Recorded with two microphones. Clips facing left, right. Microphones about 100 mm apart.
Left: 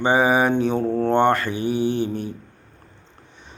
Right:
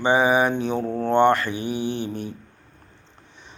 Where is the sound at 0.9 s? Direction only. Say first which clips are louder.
Left 4 dB; 30° left (ahead or behind).